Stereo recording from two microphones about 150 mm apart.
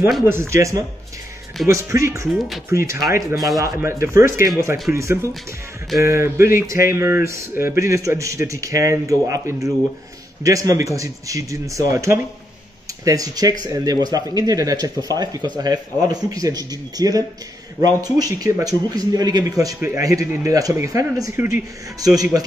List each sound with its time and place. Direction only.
0.2 s speech: 15° right (ahead or behind)